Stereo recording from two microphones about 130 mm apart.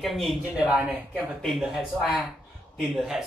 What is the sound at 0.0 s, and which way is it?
Speech, centre (ahead or behind).